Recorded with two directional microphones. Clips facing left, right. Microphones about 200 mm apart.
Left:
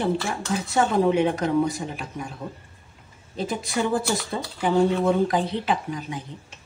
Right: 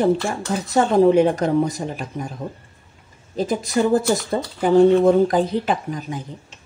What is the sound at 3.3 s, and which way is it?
A woman's voice, 40° right (ahead or behind).